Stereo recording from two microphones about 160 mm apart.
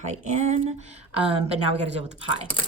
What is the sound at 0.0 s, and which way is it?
A woman's voice, 50° right (ahead or behind).